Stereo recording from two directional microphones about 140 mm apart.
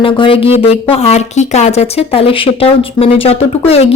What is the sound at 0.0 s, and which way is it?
A woman's voice, 40° left (ahead or behind).